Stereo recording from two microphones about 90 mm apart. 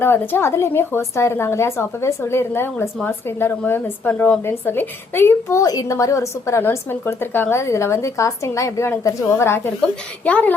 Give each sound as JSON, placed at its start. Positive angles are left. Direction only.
{"t": 0.0, "sound": "a woman's voice", "side_deg": 25}
{"t": 5.6, "sound": "a woman's voice", "side_deg": 40}
{"t": 10.2, "sound": "a woman's voice", "side_deg": 15}